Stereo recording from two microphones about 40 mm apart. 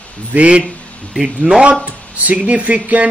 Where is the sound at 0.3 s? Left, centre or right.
Right.